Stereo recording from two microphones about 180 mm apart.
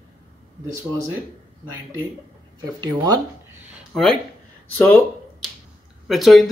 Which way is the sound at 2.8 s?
20° right (ahead or behind).